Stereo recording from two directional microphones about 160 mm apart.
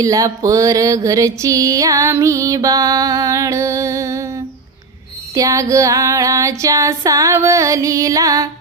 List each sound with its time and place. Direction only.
0.0 s music: 20° right (ahead or behind)
5.3 s music: 20° right (ahead or behind)